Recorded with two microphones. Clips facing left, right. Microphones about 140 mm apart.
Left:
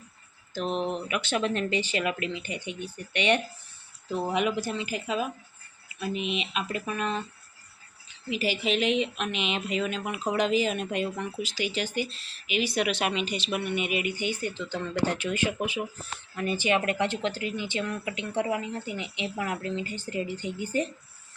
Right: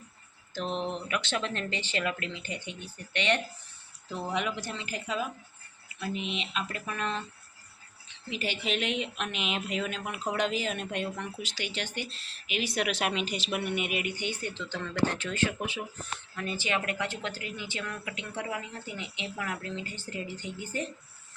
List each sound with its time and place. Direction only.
0.5 s speech: 5° left (ahead or behind)